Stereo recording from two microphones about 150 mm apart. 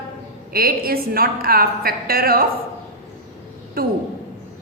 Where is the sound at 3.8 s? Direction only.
80° right.